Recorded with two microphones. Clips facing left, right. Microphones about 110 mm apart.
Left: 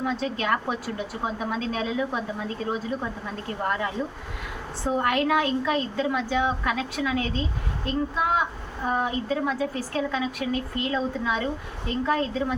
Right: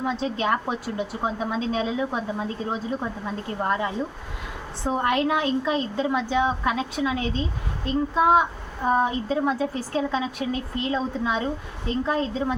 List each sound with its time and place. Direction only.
0.0 s a woman's voice: 20° right (ahead or behind)